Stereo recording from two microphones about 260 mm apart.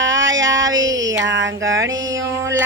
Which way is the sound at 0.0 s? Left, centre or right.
Right.